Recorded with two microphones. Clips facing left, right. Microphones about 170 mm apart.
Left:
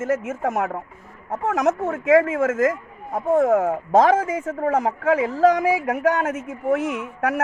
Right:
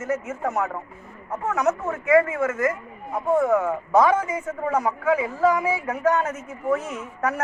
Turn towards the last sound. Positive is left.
turn(degrees=75)  # may be behind; listen again after turning